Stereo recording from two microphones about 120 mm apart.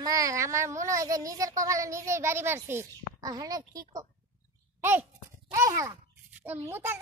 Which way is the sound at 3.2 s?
30° right (ahead or behind).